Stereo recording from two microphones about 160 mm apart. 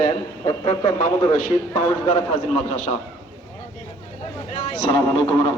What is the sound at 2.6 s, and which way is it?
Speech, 45° left (ahead or behind).